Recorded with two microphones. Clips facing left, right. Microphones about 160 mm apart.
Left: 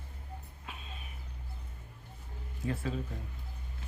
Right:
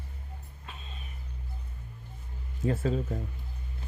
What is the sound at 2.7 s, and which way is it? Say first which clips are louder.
Speech: right 7 dB; 40° right (ahead or behind).